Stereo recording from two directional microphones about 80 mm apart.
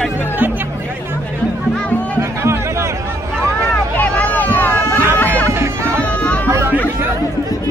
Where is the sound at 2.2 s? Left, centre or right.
Right.